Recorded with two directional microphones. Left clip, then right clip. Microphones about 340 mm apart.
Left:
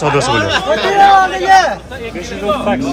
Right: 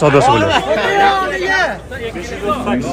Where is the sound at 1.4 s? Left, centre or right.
Left.